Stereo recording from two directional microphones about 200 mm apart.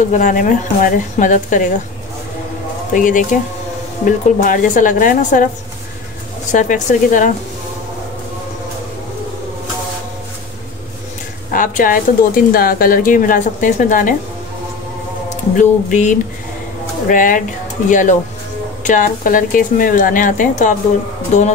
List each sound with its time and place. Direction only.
0.1 s speech: 40° left (ahead or behind)
2.9 s speech: 40° left (ahead or behind)
6.5 s speech: 40° left (ahead or behind)
11.5 s speech: 45° left (ahead or behind)
15.2 s speech: 40° left (ahead or behind)